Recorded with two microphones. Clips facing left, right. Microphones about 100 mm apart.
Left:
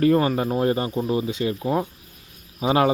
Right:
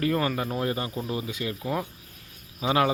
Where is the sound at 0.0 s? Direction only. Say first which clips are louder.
Left 7 dB; 30° left (ahead or behind).